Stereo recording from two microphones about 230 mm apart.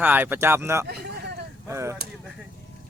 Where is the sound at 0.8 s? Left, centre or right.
Right.